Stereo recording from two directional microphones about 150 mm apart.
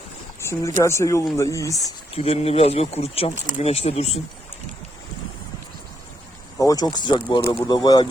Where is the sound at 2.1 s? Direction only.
40° left (ahead or behind).